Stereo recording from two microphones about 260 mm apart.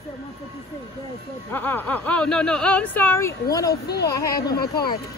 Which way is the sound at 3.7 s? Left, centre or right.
Left.